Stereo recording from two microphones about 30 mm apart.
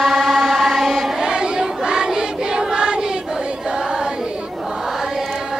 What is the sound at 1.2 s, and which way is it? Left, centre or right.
Choir, right.